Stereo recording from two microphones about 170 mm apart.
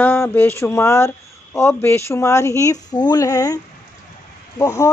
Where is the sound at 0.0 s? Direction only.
10° left (ahead or behind).